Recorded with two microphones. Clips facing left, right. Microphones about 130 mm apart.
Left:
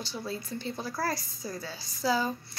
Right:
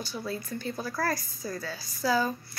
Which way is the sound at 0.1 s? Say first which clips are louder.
Right 1 dB; 25° left (ahead or behind).